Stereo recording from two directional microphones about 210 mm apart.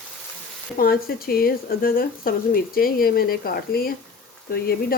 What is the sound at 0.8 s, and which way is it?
Speech, 45° left (ahead or behind).